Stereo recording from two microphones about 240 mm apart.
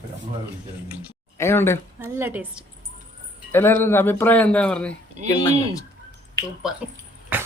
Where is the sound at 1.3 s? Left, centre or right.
Centre.